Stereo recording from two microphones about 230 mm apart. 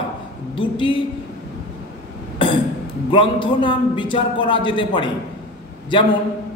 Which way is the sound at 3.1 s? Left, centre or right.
Left.